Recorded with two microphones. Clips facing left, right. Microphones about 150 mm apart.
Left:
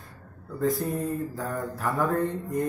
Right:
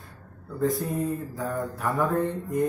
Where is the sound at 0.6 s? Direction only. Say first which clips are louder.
Right 1 dB; centre (ahead or behind).